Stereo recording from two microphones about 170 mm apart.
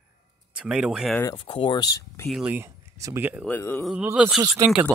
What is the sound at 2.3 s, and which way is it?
Speech, 10° right (ahead or behind).